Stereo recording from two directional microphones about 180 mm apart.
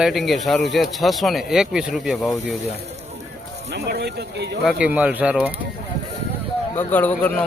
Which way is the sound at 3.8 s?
65° right (ahead or behind).